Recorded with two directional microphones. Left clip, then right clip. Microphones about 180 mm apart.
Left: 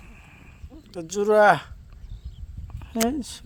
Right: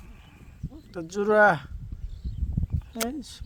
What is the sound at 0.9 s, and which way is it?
Speech, 45° left (ahead or behind).